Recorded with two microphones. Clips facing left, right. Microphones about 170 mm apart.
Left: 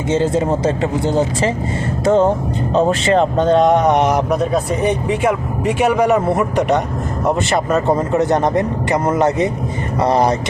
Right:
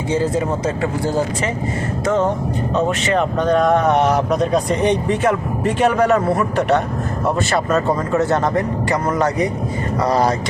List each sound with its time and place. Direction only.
0.1 s speech: 25° left (ahead or behind)